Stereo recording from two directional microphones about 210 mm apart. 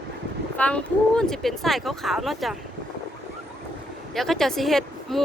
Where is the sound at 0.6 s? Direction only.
5° left (ahead or behind).